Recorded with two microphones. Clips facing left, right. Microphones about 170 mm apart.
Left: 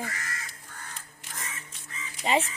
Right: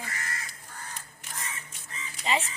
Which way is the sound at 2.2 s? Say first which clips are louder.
Left 4 dB; 55° left (ahead or behind).